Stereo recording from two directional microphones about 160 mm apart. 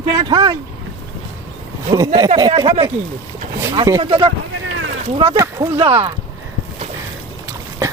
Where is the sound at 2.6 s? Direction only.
35° right (ahead or behind).